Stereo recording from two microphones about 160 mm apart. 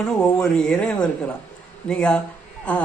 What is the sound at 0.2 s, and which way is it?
A man's voice, 5° left (ahead or behind).